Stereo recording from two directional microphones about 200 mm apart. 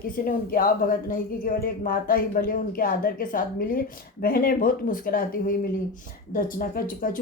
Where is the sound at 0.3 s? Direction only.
45° left (ahead or behind).